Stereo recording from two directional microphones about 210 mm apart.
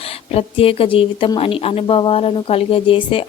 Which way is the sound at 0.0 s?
30° left (ahead or behind).